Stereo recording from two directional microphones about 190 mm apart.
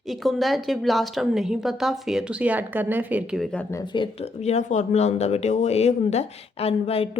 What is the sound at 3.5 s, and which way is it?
Speech, 15° left (ahead or behind).